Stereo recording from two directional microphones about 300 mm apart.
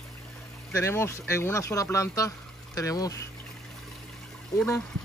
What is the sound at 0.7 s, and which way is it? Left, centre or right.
Speech, centre.